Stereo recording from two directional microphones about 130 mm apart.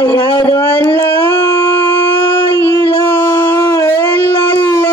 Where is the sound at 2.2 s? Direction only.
35° left (ahead or behind).